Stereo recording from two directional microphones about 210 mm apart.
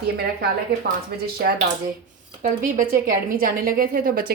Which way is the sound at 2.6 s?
40° right (ahead or behind).